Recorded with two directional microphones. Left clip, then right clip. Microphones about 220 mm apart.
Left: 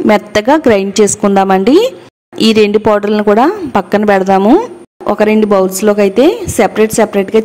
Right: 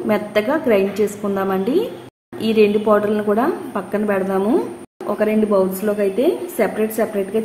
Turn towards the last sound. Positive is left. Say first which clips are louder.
# left 9 dB
turn(degrees=50)  # may be behind; listen again after turning